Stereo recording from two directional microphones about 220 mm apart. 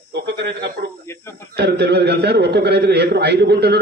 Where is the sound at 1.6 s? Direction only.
50° right (ahead or behind).